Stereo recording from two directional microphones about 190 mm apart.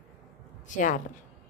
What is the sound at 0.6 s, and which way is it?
Speech, 40° left (ahead or behind).